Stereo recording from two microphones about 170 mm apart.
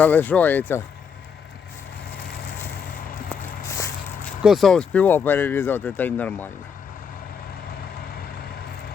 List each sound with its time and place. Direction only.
0.0 s speech: 10° left (ahead or behind)
3.2 s a sound: 15° left (ahead or behind)
4.4 s speech: centre (ahead or behind)